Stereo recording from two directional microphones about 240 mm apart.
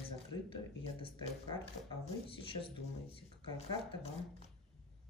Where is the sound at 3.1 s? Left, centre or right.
Left.